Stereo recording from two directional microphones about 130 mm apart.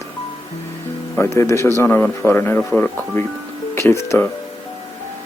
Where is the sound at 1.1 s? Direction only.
20° left (ahead or behind).